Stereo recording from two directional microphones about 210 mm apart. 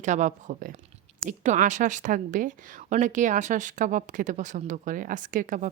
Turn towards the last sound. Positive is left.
turn(degrees=-40)  # may be behind; listen again after turning